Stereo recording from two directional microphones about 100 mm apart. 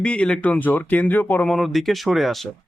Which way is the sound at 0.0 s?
10° left (ahead or behind).